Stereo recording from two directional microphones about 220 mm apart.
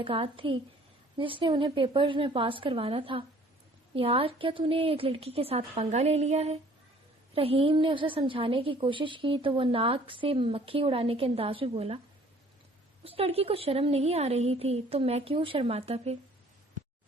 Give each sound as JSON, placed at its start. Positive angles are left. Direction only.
{"t": 0.0, "sound": "a woman's voice", "side_deg": -25}
{"t": 13.1, "sound": "a woman's voice", "side_deg": -25}